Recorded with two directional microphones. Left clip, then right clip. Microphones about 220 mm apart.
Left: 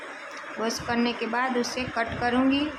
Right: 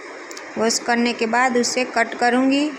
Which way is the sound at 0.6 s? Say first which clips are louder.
Right 8 dB; 20° right (ahead or behind).